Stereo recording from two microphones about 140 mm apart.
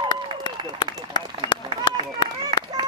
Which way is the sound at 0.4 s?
35° left (ahead or behind).